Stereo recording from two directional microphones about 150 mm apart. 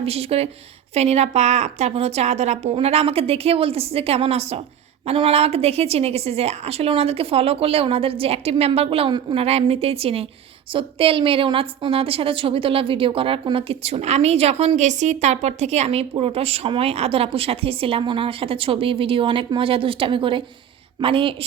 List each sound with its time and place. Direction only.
0.0 s a woman's voice: 40° right (ahead or behind)